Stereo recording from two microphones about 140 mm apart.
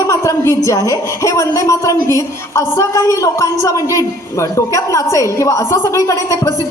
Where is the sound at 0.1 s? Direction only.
25° left (ahead or behind).